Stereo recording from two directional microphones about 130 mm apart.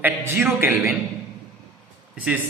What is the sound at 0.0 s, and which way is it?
Speech, 15° right (ahead or behind).